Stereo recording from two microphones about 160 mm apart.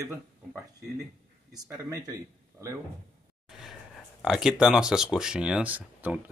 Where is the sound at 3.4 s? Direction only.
5° right (ahead or behind).